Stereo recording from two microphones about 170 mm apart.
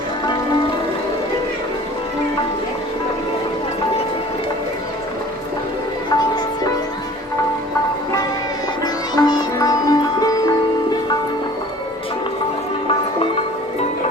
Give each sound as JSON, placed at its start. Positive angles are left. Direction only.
{"t": 8.8, "sound": "music", "side_deg": 25}